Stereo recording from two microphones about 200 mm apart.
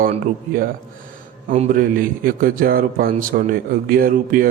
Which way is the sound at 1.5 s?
40° right (ahead or behind).